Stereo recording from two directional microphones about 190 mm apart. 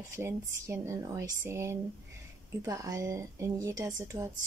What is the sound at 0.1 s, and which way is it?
Speech, 15° right (ahead or behind).